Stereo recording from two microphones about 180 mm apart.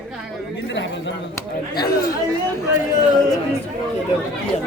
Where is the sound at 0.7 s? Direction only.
85° left.